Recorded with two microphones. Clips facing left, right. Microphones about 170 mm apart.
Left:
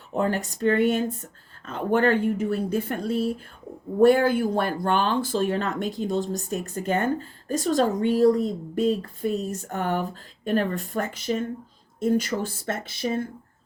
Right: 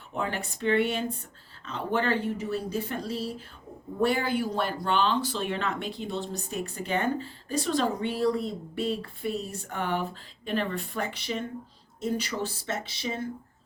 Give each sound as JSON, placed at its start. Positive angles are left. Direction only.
{"t": 0.1, "sound": "speech", "side_deg": 40}